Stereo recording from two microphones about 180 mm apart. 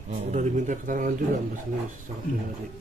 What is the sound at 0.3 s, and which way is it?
Speech, 45° right (ahead or behind).